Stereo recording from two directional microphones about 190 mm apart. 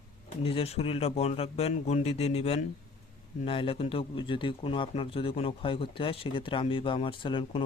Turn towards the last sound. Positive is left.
turn(degrees=25)  # may be behind; listen again after turning